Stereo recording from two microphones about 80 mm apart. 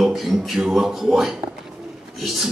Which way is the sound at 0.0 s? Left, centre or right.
Centre.